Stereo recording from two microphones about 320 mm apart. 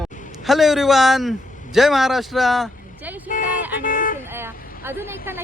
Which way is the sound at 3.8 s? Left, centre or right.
Left.